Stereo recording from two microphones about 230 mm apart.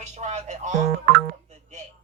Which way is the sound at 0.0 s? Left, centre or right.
Right.